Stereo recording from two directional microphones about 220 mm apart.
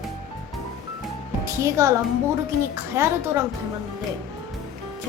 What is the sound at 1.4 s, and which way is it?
A woman's voice, 15° right (ahead or behind).